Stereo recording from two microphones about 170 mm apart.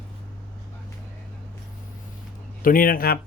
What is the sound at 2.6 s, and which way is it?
Speech, 55° left (ahead or behind).